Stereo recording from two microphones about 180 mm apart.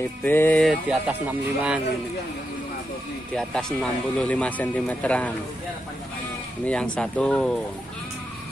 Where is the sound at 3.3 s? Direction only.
5° left (ahead or behind).